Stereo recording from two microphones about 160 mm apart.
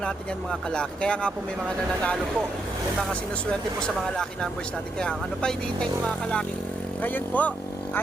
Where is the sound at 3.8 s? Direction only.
5° left (ahead or behind).